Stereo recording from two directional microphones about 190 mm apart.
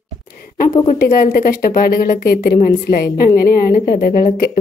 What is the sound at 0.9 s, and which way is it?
A woman's voice, 50° left (ahead or behind).